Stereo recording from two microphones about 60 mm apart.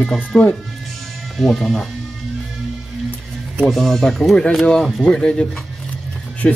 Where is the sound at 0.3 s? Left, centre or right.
Centre.